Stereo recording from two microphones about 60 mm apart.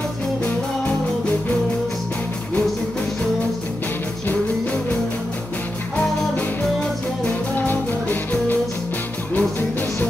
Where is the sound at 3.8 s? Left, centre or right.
Left.